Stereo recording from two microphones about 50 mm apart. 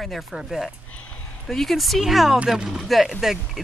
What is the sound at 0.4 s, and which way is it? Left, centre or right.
Speech, centre.